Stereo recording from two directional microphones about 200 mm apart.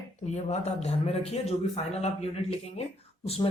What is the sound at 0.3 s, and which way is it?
Speech, 35° left (ahead or behind).